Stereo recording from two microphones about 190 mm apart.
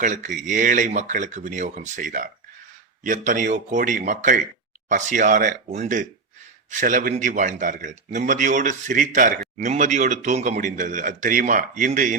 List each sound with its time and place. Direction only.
0.0 s a man's voice: 40° right (ahead or behind)